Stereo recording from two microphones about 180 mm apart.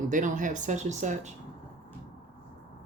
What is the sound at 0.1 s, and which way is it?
Speech, 45° right (ahead or behind).